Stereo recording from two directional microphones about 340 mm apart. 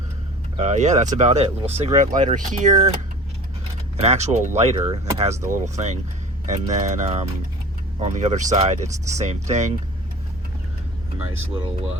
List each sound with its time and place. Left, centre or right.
0.5 s speech: centre
4.0 s speech: centre